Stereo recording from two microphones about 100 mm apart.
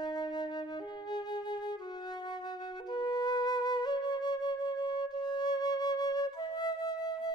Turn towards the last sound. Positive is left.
turn(degrees=45)  # may be behind; listen again after turning